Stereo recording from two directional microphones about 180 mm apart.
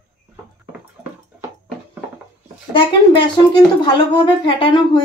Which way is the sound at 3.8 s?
30° left (ahead or behind).